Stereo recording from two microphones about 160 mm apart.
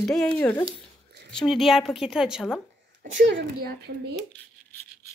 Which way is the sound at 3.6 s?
90° right.